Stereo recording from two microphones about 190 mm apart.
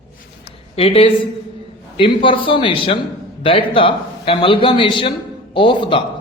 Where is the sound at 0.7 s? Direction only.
30° left (ahead or behind).